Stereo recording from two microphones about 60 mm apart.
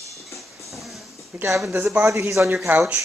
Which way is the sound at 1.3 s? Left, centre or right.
Centre.